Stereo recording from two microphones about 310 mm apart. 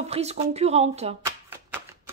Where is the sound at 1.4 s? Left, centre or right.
Centre.